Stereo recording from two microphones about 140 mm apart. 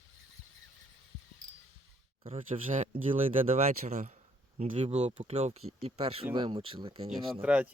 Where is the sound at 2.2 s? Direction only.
40° right (ahead or behind).